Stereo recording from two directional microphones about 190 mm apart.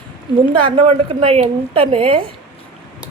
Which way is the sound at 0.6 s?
30° right (ahead or behind).